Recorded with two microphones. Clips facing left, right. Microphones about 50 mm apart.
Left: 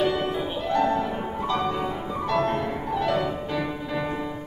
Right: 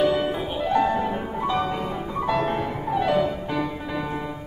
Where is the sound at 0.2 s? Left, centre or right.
Centre.